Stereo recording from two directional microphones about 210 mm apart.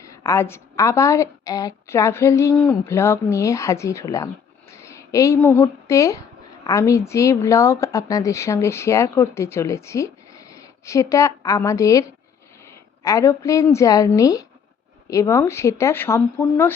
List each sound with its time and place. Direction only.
0.0 s a woman's voice: 15° left (ahead or behind)